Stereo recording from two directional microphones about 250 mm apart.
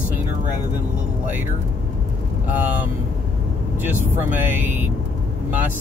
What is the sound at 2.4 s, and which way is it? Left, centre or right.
Speech, centre.